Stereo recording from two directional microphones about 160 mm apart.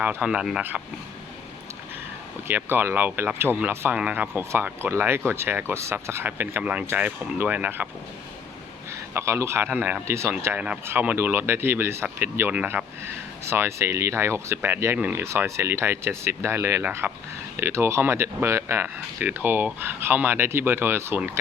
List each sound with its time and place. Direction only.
0.0 s speech: 10° right (ahead or behind)
2.5 s speech: 15° right (ahead or behind)
8.9 s speech: 15° right (ahead or behind)